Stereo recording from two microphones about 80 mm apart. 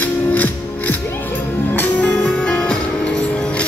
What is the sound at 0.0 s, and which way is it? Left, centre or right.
Music, left.